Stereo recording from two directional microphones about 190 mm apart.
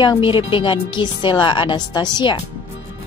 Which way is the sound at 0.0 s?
25° left (ahead or behind).